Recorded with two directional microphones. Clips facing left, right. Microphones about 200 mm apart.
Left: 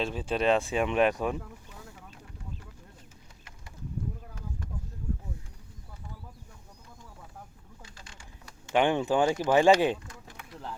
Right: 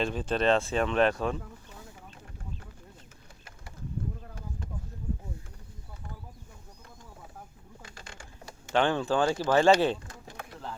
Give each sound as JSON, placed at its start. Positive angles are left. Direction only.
{"t": 0.0, "sound": "speech", "side_deg": 5}
{"t": 8.0, "sound": "typewriter", "side_deg": -60}
{"t": 8.7, "sound": "speech", "side_deg": 15}